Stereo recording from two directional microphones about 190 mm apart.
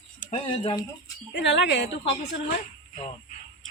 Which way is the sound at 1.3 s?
70° left (ahead or behind).